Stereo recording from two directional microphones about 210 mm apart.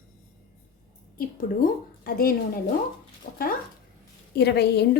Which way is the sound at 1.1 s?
40° left (ahead or behind).